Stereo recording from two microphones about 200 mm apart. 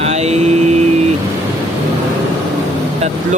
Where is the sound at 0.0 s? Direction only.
35° right (ahead or behind).